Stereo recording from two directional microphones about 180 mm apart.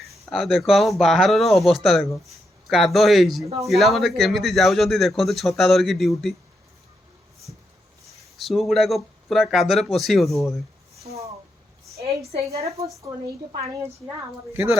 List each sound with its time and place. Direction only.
0.3 s a man's voice: centre (ahead or behind)
3.4 s a woman's voice: 15° right (ahead or behind)
3.7 s a man's voice: centre (ahead or behind)
8.4 s a man's voice: centre (ahead or behind)
11.0 s speech: 15° right (ahead or behind)
12.3 s a woman's voice: 35° right (ahead or behind)
12.8 s a woman's voice: 15° right (ahead or behind)